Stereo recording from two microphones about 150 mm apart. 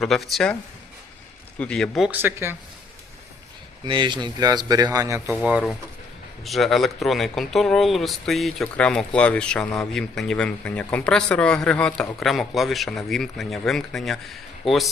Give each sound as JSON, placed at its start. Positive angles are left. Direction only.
{"t": 0.0, "sound": "speech", "side_deg": 0}
{"t": 1.5, "sound": "speech", "side_deg": 5}
{"t": 2.0, "sound": "speech", "side_deg": -15}
{"t": 3.8, "sound": "speech", "side_deg": -35}
{"t": 5.3, "sound": "speech", "side_deg": -5}